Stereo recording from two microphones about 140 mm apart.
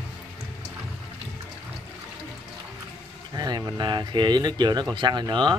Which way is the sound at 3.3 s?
30° right (ahead or behind).